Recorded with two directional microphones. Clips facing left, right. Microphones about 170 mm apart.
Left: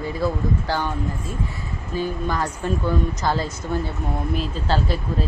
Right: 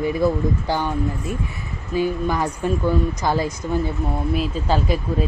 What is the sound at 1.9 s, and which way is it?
Speech, 15° right (ahead or behind).